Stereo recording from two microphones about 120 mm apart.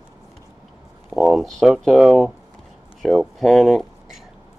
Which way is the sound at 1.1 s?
Centre (ahead or behind).